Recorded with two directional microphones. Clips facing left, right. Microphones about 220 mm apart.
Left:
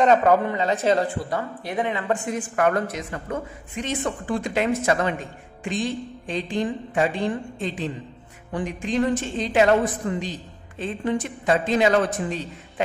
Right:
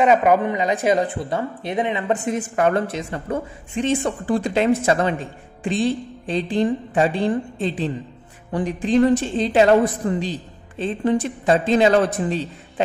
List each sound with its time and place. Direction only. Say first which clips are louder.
0.0 s a woman's voice: right 1 dB; 10° right (ahead or behind); by 12.8 s 30° right (ahead or behind)